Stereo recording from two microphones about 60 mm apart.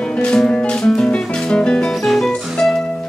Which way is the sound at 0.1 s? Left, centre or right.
Centre.